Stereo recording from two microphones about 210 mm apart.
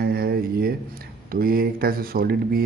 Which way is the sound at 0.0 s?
45° right (ahead or behind).